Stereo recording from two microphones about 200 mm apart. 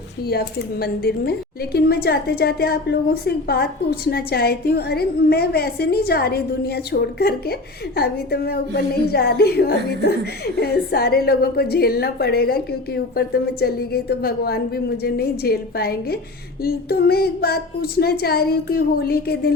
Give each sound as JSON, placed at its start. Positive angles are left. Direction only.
{"t": 0.3, "sound": "speech", "side_deg": 50}